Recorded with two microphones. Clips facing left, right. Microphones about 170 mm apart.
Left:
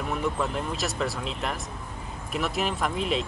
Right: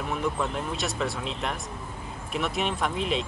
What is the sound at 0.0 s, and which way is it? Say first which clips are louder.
Speech: even; centre (ahead or behind).